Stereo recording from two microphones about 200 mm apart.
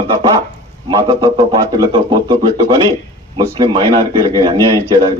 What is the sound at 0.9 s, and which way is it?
A man's voice, 20° right (ahead or behind).